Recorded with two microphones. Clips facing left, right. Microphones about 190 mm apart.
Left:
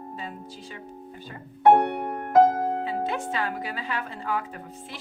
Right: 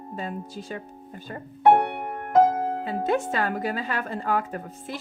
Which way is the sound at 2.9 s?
45° right (ahead or behind).